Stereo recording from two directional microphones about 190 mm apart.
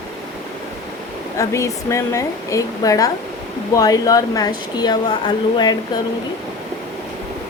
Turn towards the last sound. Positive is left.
turn(degrees=25)  # may be behind; listen again after turning